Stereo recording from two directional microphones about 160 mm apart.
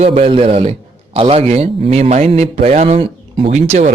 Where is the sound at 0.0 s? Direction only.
35° right (ahead or behind).